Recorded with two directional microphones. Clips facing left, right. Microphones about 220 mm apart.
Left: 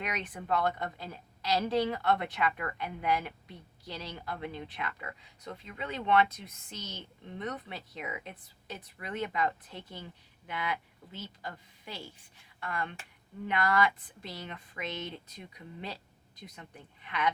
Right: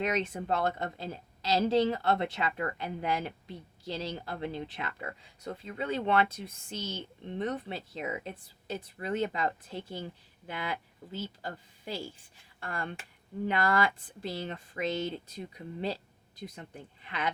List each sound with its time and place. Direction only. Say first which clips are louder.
0.0 s a woman's voice: right 7 dB; 25° right (ahead or behind)